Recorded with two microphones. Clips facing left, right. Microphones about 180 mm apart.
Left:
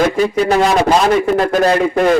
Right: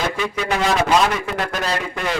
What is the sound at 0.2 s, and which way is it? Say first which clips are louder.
A man's voice: left 9 dB; 40° left (ahead or behind).